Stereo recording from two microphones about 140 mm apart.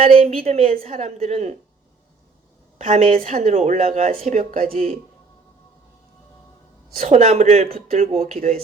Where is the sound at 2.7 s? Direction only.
60° right (ahead or behind).